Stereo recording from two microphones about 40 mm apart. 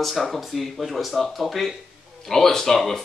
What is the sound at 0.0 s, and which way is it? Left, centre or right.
Speech, centre.